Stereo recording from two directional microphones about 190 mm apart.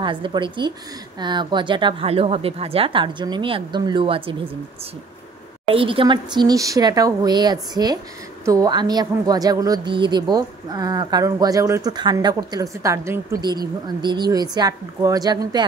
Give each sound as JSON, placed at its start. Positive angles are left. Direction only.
{"t": 0.0, "sound": "speech", "side_deg": -25}
{"t": 5.7, "sound": "a woman's voice", "side_deg": -30}